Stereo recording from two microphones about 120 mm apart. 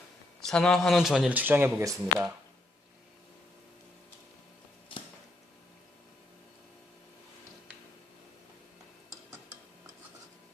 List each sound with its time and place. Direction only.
0.4 s speech: 5° left (ahead or behind)
1.3 s speech: 15° right (ahead or behind)
1.8 s speech: 25° right (ahead or behind)
4.9 s a sound: 45° left (ahead or behind)